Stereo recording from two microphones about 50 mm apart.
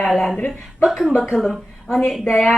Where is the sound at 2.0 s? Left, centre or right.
Centre.